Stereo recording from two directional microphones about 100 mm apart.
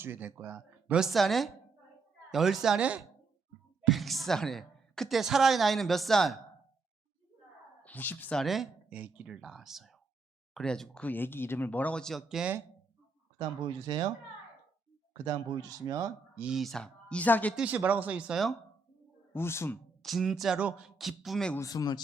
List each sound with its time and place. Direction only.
0.0 s speech: 20° right (ahead or behind)
0.9 s speech: centre (ahead or behind)
3.8 s speech: centre (ahead or behind)
7.9 s speech: 20° left (ahead or behind)
8.4 s speech: centre (ahead or behind)
8.9 s speech: 15° right (ahead or behind)
13.8 s speech: 40° right (ahead or behind)
15.2 s speech: 35° right (ahead or behind)
16.4 s speech: 5° right (ahead or behind); by 17.5 s 15° left (ahead or behind)
17.8 s speech: 15° right (ahead or behind)
18.3 s speech: centre (ahead or behind)
19.3 s speech: 25° left (ahead or behind)
20.0 s speech: centre (ahead or behind)
21.6 s speech: 35° left (ahead or behind)